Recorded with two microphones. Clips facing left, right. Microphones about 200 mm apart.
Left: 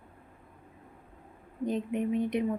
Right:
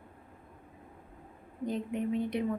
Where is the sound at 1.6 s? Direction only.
20° left (ahead or behind).